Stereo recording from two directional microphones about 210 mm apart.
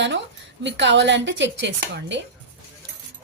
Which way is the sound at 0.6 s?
55° right (ahead or behind).